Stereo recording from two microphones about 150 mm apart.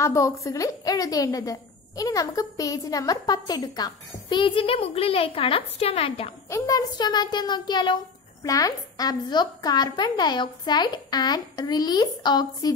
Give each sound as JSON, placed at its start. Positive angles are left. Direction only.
{"t": 0.0, "sound": "a woman's voice", "side_deg": 20}
{"t": 6.5, "sound": "a woman's voice", "side_deg": 25}